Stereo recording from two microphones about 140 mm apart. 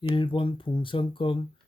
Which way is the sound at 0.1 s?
35° left (ahead or behind).